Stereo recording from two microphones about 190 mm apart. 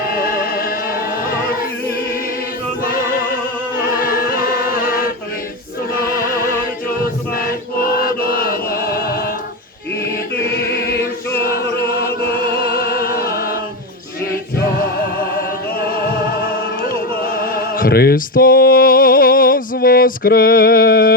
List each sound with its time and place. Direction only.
0.1 s music: 50° left (ahead or behind)
3.8 s singing: 50° left (ahead or behind)
5.9 s music: 50° left (ahead or behind)
7.3 s chant: 50° left (ahead or behind)
10.7 s choir: 55° left (ahead or behind)
11.3 s music: 55° left (ahead or behind)
15.4 s music: 55° left (ahead or behind)